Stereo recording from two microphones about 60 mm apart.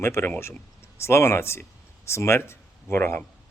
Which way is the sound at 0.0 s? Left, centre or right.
Left.